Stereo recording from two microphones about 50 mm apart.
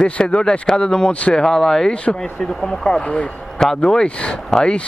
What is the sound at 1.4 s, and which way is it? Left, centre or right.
Speech, centre.